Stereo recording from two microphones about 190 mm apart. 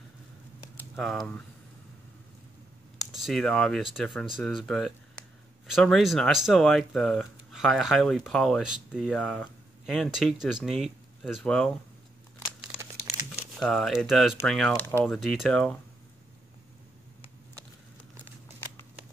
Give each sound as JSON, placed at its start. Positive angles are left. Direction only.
{"t": 0.7, "sound": "speech", "side_deg": 0}
{"t": 3.0, "sound": "speech", "side_deg": 0}
{"t": 13.6, "sound": "speech", "side_deg": 0}